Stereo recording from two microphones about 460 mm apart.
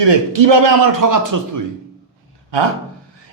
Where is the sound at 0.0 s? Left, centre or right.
Right.